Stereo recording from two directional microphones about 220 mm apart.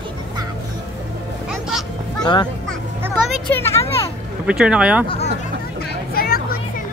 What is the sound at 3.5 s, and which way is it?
Speech, 10° left (ahead or behind).